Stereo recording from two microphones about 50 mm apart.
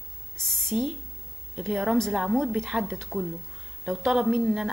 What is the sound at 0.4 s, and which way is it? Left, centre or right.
Speech, centre.